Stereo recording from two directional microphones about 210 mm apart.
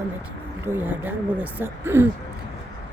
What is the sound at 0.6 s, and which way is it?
Speech, 10° right (ahead or behind).